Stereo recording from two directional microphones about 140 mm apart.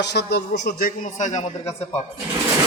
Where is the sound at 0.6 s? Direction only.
85° left; by 1.4 s 60° left (ahead or behind).